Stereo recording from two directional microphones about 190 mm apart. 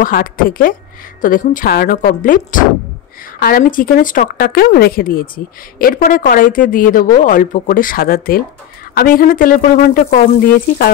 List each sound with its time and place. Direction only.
0.0 s speech: 50° left (ahead or behind)